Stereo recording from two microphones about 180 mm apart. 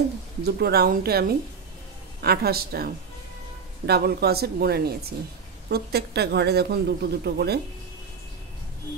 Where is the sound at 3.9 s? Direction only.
60° right (ahead or behind).